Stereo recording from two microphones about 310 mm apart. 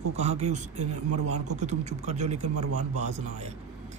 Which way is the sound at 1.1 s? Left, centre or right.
Right.